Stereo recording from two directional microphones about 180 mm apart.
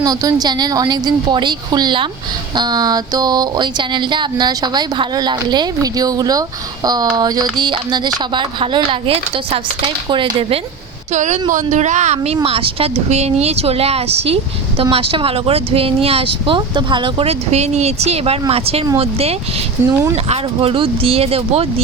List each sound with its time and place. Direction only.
0.0 s a sound: 20° right (ahead or behind)
11.1 s speech: 40° right (ahead or behind)
19.8 s speech: 15° right (ahead or behind)
20.2 s speech: 35° right (ahead or behind)